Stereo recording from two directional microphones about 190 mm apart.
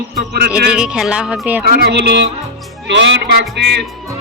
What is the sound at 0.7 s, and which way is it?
Speech, 5° right (ahead or behind).